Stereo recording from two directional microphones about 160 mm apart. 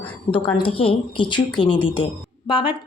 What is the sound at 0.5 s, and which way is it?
Speech, 35° left (ahead or behind).